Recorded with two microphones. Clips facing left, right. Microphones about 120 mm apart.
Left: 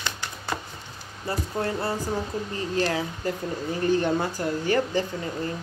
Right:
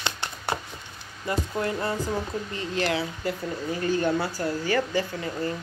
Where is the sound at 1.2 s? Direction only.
35° left (ahead or behind).